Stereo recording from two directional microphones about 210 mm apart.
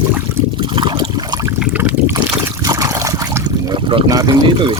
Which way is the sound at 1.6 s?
5° right (ahead or behind).